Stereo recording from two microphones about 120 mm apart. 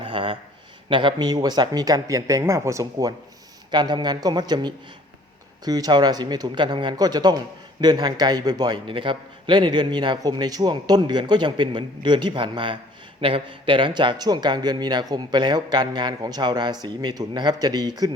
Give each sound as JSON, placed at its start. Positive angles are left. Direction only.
{"t": 0.0, "sound": "a man's voice", "side_deg": -45}
{"t": 3.7, "sound": "a man's voice", "side_deg": -35}